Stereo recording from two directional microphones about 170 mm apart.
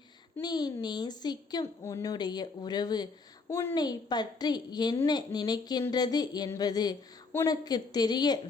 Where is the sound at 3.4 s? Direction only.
15° left (ahead or behind).